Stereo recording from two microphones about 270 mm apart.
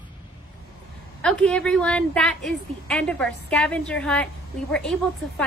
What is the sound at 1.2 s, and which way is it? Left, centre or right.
A woman's voice, centre.